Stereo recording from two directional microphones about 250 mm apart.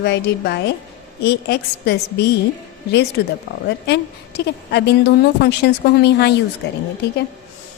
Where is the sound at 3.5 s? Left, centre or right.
Left.